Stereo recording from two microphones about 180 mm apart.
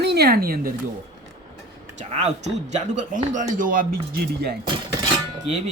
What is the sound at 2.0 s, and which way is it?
Speech, 40° right (ahead or behind).